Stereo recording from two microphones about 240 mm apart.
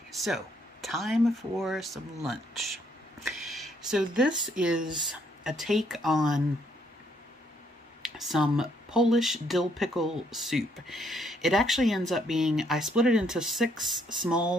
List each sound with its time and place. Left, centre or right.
0.1 s speech: centre
8.0 s speech: centre